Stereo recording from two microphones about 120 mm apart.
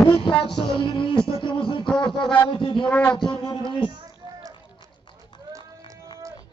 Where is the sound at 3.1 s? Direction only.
45° left (ahead or behind).